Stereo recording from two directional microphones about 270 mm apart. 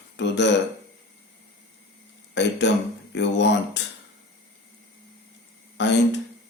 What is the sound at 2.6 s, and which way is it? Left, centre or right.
Speech, left.